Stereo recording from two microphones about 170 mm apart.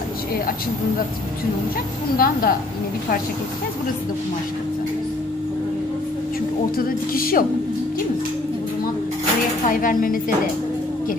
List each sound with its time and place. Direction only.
2.1 s speech: 60° left (ahead or behind)
6.8 s speech: 60° left (ahead or behind)
9.7 s speech: 55° left (ahead or behind)